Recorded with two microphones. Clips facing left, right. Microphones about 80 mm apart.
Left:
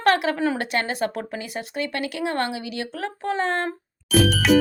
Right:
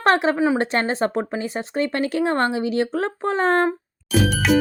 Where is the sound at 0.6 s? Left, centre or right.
Right.